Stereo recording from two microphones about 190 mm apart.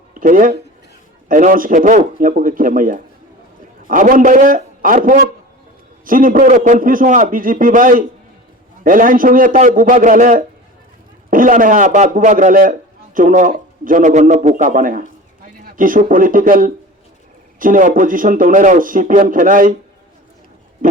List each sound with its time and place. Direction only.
0.1 s a man's voice: 45° right (ahead or behind)
6.1 s speech: 45° right (ahead or behind)